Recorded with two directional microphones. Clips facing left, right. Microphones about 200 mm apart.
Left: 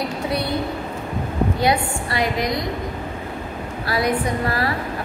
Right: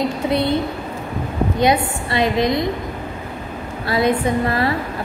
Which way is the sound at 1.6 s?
20° right (ahead or behind).